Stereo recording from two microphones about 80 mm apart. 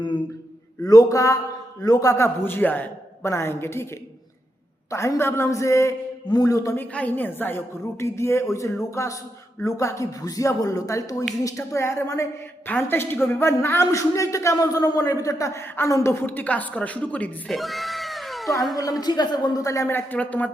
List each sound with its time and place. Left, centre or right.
0.9 s a man's voice: left
3.2 s a man's voice: left
4.9 s a man's voice: left
6.2 s a man's voice: left
6.7 s a woman's voice: left
12.6 s a woman's voice: left
15.6 s a woman's voice: left
17.5 s cat: centre
18.8 s a man's voice: left
19.9 s a woman's voice: left